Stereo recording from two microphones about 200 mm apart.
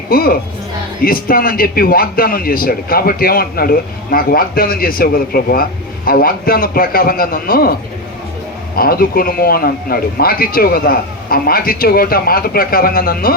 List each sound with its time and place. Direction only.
0.1 s a man's voice: 50° left (ahead or behind)
8.7 s a man's voice: 45° left (ahead or behind)